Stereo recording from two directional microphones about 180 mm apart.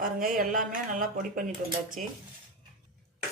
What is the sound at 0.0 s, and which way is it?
Speech, 50° right (ahead or behind).